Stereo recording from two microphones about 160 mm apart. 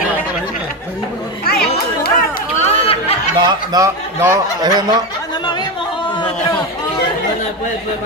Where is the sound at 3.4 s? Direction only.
25° right (ahead or behind).